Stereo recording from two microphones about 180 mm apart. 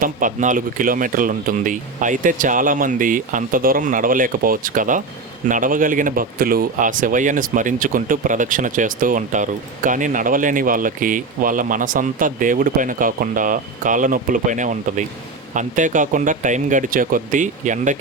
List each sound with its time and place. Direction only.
0.0 s speech: 45° right (ahead or behind)